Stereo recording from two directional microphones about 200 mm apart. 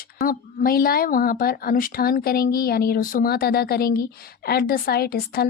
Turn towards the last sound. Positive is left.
turn(degrees=50)  # may be behind; listen again after turning